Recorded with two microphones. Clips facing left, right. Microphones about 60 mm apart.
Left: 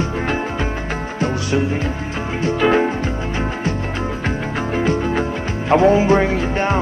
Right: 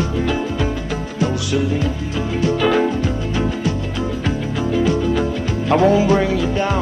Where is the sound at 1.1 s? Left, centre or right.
Left.